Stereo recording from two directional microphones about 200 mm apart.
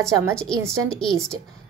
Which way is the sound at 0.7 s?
5° left (ahead or behind).